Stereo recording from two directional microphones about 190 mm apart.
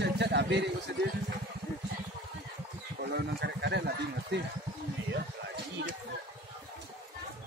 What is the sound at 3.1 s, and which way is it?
Speech, 60° right (ahead or behind).